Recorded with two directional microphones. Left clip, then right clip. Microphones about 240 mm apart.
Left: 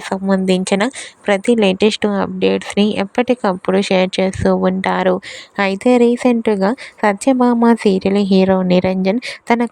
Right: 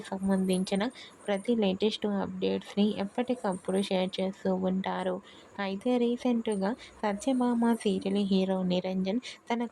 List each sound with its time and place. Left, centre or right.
0.1 s a woman's voice: left